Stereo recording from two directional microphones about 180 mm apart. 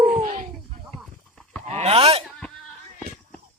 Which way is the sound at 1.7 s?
35° right (ahead or behind).